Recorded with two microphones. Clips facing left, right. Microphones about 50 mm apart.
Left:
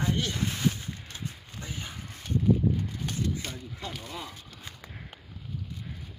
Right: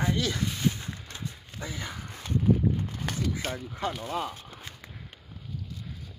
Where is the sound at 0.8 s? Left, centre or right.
Right.